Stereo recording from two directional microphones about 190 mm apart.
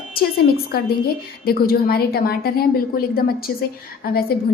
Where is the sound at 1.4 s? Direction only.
55° left (ahead or behind).